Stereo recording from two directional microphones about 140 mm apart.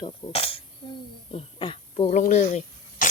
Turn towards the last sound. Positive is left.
turn(degrees=55)  # may be behind; listen again after turning